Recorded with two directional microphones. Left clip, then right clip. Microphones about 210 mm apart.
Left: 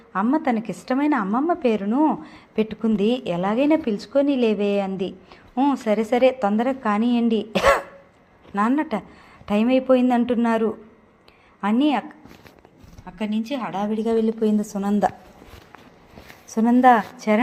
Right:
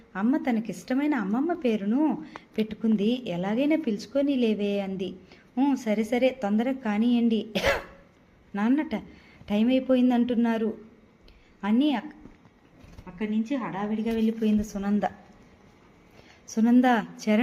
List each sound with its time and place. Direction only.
0.1 s a woman's voice: 5° left (ahead or behind)
13.1 s a woman's voice: 35° left (ahead or behind)
14.0 s a woman's voice: 15° left (ahead or behind)
16.5 s a woman's voice: 10° left (ahead or behind)